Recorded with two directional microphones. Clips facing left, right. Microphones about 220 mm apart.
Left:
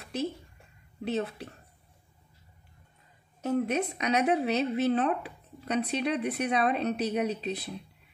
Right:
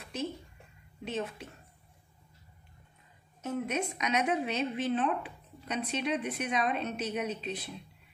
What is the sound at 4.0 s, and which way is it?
Speech, 35° left (ahead or behind).